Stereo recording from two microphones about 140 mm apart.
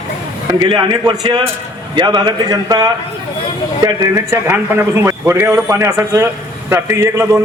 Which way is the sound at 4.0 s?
20° right (ahead or behind).